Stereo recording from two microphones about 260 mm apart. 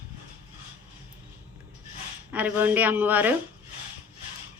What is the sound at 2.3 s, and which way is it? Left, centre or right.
A woman's voice, centre.